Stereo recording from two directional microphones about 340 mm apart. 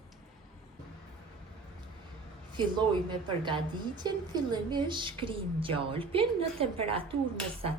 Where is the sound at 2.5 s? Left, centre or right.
Centre.